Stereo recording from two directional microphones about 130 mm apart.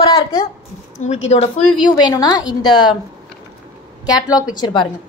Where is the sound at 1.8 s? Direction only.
30° left (ahead or behind).